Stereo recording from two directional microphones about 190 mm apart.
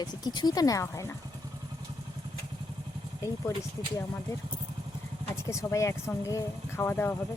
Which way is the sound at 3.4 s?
15° left (ahead or behind).